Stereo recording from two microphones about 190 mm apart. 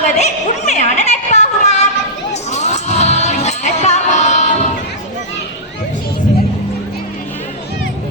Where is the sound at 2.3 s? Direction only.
35° left (ahead or behind).